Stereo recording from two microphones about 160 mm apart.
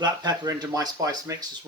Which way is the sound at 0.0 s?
25° right (ahead or behind).